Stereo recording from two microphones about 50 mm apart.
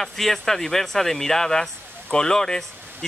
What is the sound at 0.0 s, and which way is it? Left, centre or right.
Speech, centre.